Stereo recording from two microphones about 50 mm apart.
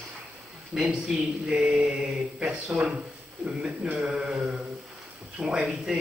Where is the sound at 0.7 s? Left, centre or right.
Centre.